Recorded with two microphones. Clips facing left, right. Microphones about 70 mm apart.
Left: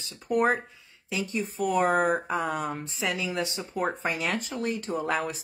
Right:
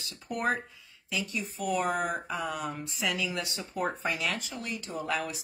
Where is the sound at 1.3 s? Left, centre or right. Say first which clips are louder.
Left 5 dB; left.